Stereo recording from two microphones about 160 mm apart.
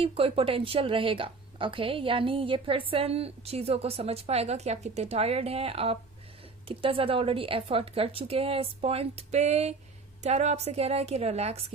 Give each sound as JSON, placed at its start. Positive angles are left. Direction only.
{"t": 0.0, "sound": "a woman's voice", "side_deg": -35}